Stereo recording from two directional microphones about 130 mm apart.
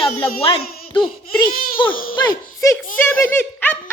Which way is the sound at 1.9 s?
90° left.